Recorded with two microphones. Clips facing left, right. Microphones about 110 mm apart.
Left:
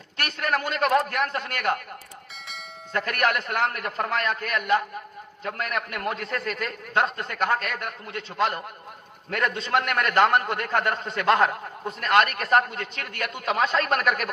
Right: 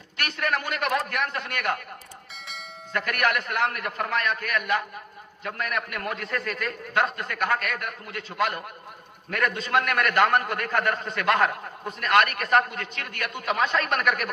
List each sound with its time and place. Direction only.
0.2 s a man's voice: 30° left (ahead or behind)
2.9 s a man's voice: 30° left (ahead or behind)